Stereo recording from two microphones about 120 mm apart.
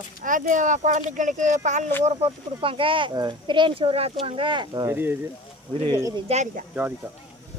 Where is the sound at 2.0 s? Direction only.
55° right (ahead or behind); by 4.9 s 35° right (ahead or behind).